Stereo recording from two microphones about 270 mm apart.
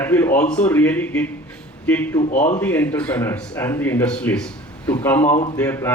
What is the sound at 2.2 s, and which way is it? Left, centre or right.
Speech, left.